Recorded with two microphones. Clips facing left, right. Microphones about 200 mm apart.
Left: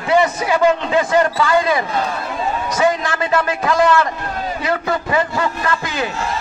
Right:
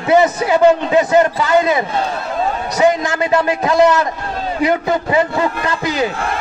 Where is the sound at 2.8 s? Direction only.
20° right (ahead or behind).